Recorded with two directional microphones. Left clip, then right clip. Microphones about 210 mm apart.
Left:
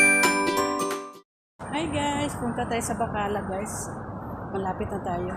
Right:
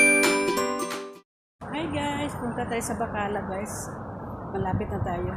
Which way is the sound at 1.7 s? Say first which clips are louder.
Left 2 dB; 15° left (ahead or behind).